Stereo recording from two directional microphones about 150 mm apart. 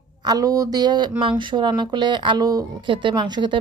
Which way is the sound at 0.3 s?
25° right (ahead or behind).